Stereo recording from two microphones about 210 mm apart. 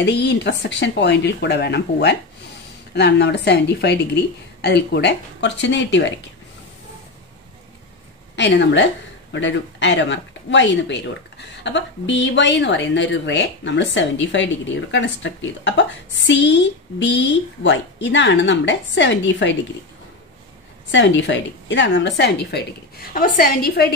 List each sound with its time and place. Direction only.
0.0 s a woman's voice: 55° left (ahead or behind)
8.4 s speech: 55° left (ahead or behind)
17.6 s speech: 55° left (ahead or behind)
20.9 s speech: 60° left (ahead or behind)
23.1 s a woman's voice: 40° left (ahead or behind)